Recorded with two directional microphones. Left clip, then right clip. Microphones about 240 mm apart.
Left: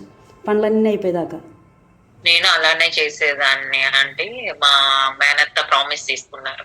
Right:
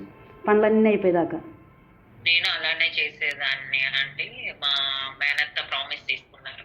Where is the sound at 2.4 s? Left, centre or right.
Left.